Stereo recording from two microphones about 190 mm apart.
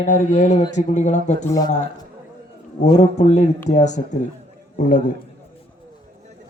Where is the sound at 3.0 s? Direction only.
40° left (ahead or behind).